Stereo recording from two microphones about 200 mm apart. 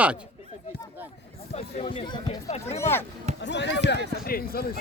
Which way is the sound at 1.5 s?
30° left (ahead or behind).